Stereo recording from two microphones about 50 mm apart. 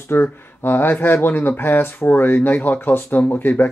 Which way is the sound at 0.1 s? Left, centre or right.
Left.